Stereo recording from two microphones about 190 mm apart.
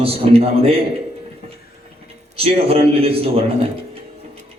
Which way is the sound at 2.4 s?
30° right (ahead or behind).